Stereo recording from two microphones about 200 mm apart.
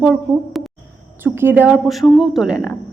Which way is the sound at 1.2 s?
10° right (ahead or behind).